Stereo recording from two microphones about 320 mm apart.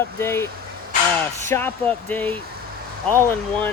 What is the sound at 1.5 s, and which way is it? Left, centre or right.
Speech, centre.